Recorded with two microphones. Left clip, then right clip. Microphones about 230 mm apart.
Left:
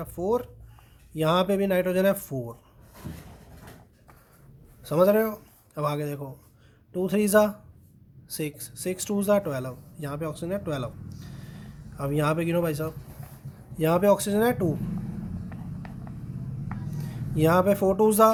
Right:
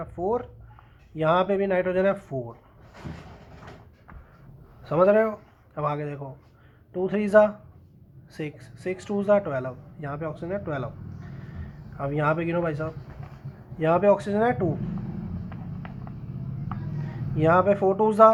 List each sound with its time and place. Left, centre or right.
0.0 s speech: left
1.1 s speech: left
4.9 s speech: left
11.9 s speech: left
15.4 s a sound: left
17.3 s speech: left